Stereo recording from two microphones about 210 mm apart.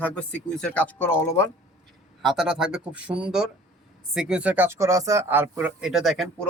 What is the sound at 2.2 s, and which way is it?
Speech, centre (ahead or behind).